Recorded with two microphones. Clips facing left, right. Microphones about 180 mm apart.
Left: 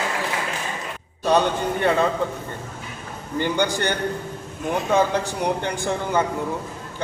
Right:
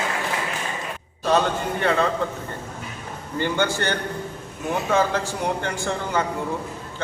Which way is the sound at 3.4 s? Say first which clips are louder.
Left 1 dB; 15° left (ahead or behind).